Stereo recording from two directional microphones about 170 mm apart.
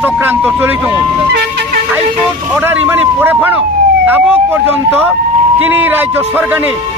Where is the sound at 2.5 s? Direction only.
10° right (ahead or behind).